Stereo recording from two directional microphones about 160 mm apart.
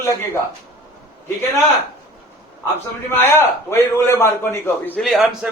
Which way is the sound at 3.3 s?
15° left (ahead or behind).